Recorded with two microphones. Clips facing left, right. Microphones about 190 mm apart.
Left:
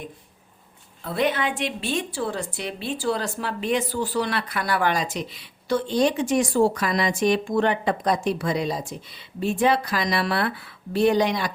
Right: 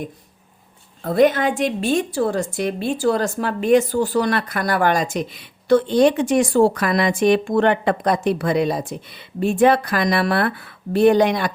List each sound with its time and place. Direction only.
1.0 s a woman's voice: 45° right (ahead or behind)